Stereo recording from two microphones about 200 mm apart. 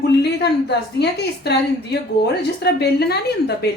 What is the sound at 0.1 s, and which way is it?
A woman's voice, 55° left (ahead or behind).